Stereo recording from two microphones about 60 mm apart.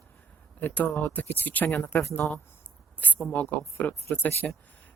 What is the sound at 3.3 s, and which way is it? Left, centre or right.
Speech, left.